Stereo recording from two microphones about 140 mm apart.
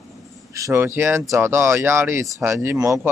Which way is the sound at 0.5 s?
20° right (ahead or behind).